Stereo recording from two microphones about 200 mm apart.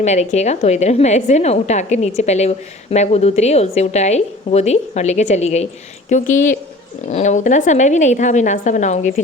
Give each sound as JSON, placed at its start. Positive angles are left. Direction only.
{"t": 0.0, "sound": "a woman's voice", "side_deg": 35}